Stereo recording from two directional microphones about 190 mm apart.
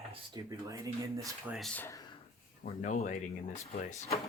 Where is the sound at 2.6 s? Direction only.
35° left (ahead or behind).